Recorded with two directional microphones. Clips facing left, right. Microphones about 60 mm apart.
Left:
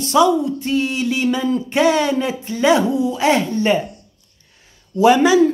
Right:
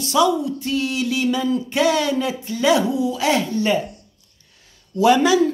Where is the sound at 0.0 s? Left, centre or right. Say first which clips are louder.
Left 3 dB; left.